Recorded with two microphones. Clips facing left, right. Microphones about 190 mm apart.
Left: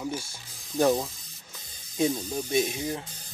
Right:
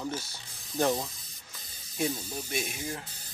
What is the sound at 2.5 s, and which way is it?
Speech, 20° left (ahead or behind).